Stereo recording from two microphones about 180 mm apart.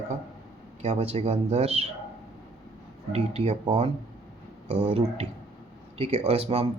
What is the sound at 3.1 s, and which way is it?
Speech, 35° right (ahead or behind).